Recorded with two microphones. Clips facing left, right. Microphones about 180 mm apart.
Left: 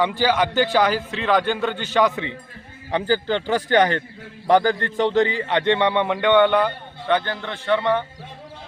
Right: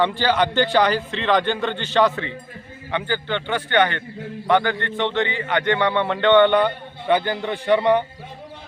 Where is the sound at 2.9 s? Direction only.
35° left (ahead or behind); by 6.7 s 5° left (ahead or behind).